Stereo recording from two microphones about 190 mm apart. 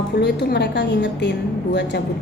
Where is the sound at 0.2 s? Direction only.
60° left (ahead or behind).